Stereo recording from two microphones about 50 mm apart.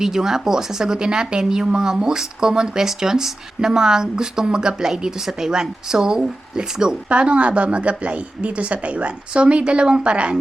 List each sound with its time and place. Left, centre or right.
0.0 s speech: centre
7.1 s a woman's voice: right